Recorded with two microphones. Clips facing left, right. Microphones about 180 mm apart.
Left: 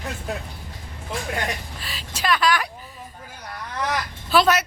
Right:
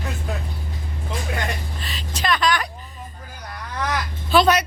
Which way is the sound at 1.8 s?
5° left (ahead or behind).